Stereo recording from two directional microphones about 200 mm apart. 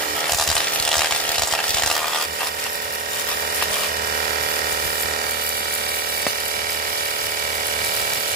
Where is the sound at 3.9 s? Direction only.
45° right (ahead or behind).